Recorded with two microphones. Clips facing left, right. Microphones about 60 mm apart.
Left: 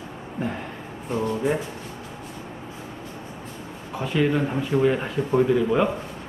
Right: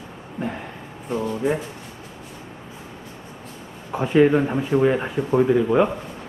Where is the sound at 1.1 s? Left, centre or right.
Centre.